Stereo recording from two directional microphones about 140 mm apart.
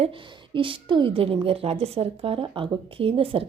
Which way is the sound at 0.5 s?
40° right (ahead or behind).